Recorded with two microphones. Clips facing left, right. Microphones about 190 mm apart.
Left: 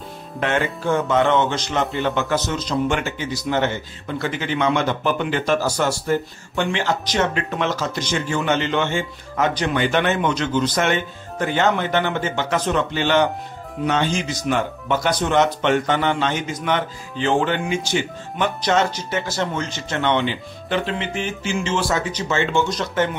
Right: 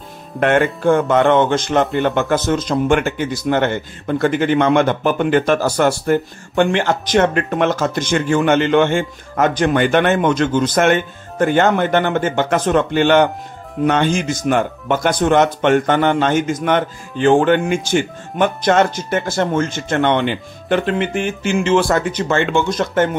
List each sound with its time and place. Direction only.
0.4 s speech: 55° right (ahead or behind)